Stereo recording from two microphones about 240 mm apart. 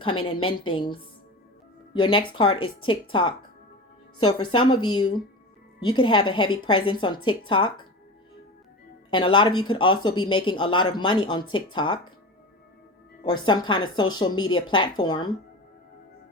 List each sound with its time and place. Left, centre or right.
0.0 s speech: left
5.9 s speech: centre
9.0 s speech: centre
13.2 s speech: centre